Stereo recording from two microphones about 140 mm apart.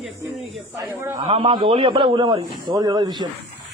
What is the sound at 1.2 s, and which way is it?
A man's voice, 40° right (ahead or behind).